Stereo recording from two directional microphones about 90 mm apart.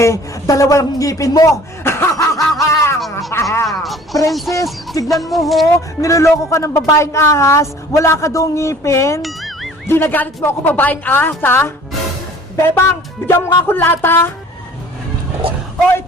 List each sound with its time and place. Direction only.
0.0 s speech: 35° left (ahead or behind)
1.8 s snicker: 25° left (ahead or behind)
3.0 s speech: centre (ahead or behind)
3.3 s speech: 30° left (ahead or behind)
3.7 s speech: centre (ahead or behind)
5.6 s speech: 35° left (ahead or behind)
9.2 s music: centre (ahead or behind)
9.8 s a woman's voice: 25° left (ahead or behind)